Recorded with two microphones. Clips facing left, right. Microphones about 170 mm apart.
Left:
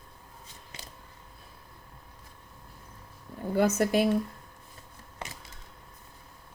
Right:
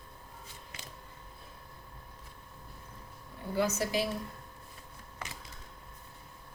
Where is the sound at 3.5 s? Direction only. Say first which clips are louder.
Left 6 dB; 55° left (ahead or behind).